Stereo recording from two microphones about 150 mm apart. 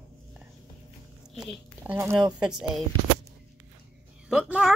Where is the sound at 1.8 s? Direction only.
15° right (ahead or behind).